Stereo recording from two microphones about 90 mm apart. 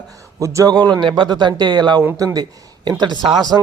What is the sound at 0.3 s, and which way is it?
A man's voice, 35° right (ahead or behind).